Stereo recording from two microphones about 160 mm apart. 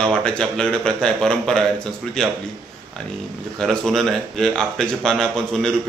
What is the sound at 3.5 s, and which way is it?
A man's voice, 5° left (ahead or behind).